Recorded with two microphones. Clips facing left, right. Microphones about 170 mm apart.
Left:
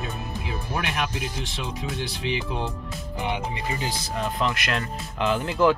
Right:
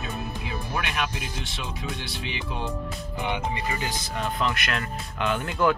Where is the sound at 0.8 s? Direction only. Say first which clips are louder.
Left 2 dB; 35° left (ahead or behind).